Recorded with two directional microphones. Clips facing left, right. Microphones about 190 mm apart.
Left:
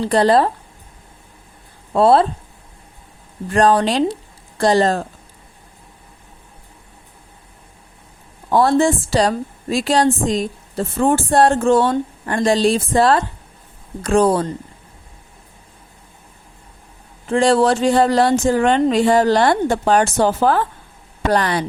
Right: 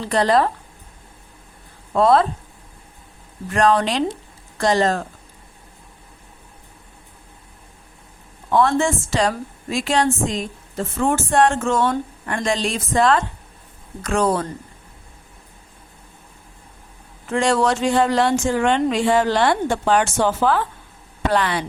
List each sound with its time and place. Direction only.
0.0 s a woman's voice: 30° left (ahead or behind)
1.9 s speech: 30° left (ahead or behind)
3.5 s speech: 35° left (ahead or behind)
8.4 s a woman's voice: 35° left (ahead or behind)
17.2 s a woman's voice: 30° left (ahead or behind)